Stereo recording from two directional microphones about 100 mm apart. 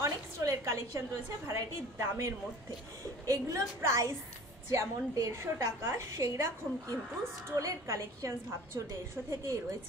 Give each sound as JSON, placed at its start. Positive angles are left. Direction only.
{"t": 0.0, "sound": "a woman's voice", "side_deg": -30}